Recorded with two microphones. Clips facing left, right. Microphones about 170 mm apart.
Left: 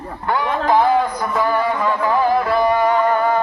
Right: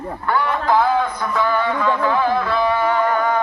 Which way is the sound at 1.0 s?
40° left (ahead or behind).